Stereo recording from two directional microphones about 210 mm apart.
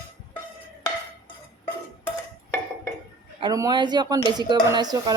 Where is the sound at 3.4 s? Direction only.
15° right (ahead or behind).